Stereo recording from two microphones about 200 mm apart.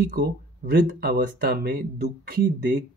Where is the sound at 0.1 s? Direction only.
50° right (ahead or behind).